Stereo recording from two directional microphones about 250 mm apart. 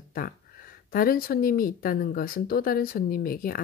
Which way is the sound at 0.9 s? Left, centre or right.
Left.